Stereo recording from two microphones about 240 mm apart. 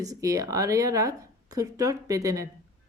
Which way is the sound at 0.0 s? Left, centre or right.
Centre.